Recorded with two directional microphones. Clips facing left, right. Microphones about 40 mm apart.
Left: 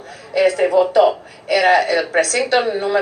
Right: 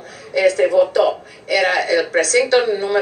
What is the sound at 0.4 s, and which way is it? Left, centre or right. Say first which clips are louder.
Speech: even; left.